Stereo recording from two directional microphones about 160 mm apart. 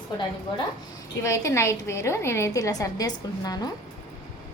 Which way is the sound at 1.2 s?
20° left (ahead or behind).